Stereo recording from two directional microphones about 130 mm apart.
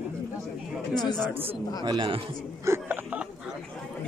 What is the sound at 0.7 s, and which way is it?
Chatter, 5° left (ahead or behind).